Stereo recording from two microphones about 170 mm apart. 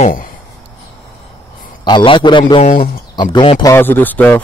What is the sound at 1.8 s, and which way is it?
Speech, 25° left (ahead or behind).